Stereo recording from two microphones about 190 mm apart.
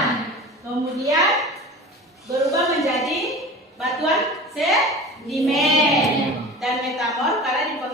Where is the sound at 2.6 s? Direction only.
Centre (ahead or behind).